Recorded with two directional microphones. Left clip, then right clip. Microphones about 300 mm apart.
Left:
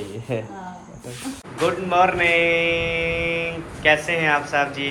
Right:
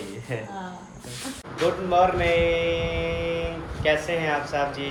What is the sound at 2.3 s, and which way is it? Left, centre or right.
Music, centre.